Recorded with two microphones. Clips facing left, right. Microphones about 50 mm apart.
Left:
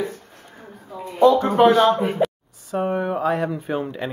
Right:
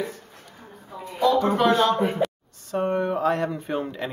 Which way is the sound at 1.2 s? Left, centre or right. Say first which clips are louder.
Left 5 dB; left.